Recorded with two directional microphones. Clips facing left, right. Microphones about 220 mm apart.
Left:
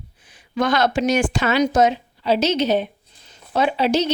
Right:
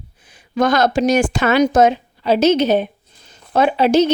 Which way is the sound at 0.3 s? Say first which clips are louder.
Right 4 dB; 45° right (ahead or behind).